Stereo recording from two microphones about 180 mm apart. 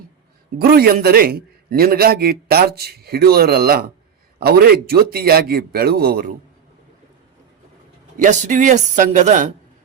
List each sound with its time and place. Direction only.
0.6 s a man's voice: 55° right (ahead or behind)
8.2 s speech: 40° right (ahead or behind)